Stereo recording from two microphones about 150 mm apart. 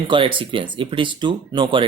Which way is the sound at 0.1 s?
35° right (ahead or behind).